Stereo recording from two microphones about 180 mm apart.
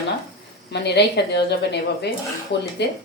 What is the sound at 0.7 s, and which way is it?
Speech, 70° left (ahead or behind).